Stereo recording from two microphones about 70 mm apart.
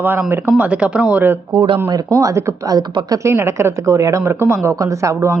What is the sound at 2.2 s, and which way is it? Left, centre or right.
A woman's voice, right.